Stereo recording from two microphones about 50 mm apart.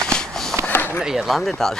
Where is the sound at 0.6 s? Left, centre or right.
Left.